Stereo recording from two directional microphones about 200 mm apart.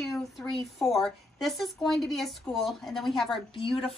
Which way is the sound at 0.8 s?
Centre (ahead or behind).